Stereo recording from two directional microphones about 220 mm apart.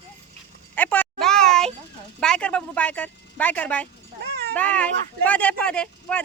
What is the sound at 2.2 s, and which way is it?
Speech, 5° left (ahead or behind).